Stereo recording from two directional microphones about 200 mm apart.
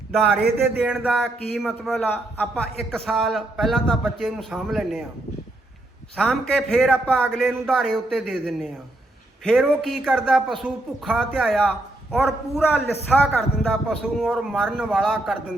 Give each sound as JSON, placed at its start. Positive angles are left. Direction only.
{"t": 0.5, "sound": "a man's voice", "side_deg": -5}
{"t": 6.1, "sound": "a man's voice", "side_deg": 5}
{"t": 12.6, "sound": "a man's voice", "side_deg": 10}